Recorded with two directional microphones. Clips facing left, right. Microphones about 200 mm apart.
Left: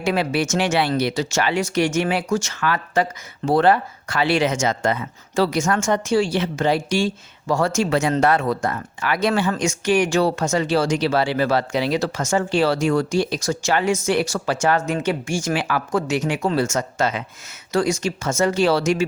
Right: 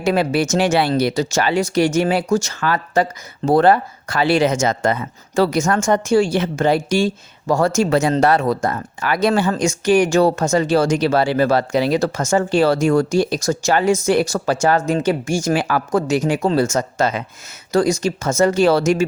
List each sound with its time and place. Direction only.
0.0 s speech: 40° right (ahead or behind)